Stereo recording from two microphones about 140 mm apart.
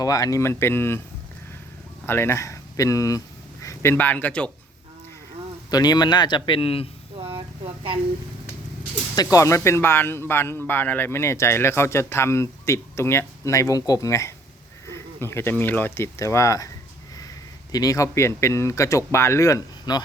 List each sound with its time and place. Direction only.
0.0 s speech: 25° left (ahead or behind)
2.0 s speech: 15° left (ahead or behind)
5.7 s speech: 30° left (ahead or behind)
7.2 s a sound: 40° right (ahead or behind)
9.1 s speech: 25° left (ahead or behind)